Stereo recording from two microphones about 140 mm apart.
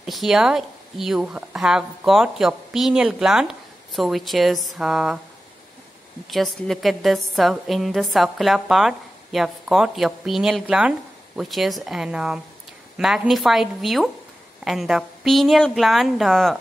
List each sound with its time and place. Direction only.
0.0 s a woman's voice: centre (ahead or behind)
6.3 s a woman's voice: centre (ahead or behind)